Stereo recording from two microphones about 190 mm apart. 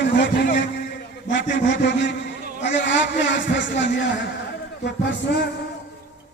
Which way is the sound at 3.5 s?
70° left (ahead or behind).